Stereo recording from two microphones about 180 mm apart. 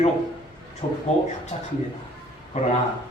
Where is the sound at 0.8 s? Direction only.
30° left (ahead or behind).